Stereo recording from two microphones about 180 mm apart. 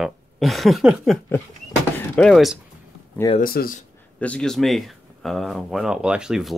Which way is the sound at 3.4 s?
55° left (ahead or behind).